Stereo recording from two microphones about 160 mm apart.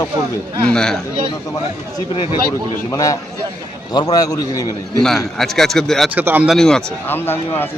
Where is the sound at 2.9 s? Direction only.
20° left (ahead or behind).